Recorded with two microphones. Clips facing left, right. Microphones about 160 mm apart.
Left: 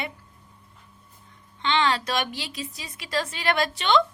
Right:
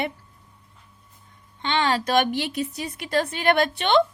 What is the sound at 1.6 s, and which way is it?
A woman's voice, 50° right (ahead or behind).